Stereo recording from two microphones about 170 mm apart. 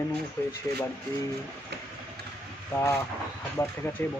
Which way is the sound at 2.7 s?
15° left (ahead or behind).